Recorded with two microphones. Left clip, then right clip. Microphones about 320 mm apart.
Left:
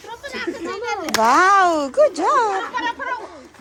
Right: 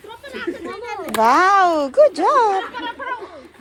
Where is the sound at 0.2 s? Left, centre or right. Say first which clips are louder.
Even; centre.